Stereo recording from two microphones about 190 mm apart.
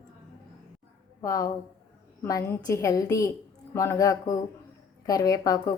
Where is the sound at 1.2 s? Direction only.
15° left (ahead or behind).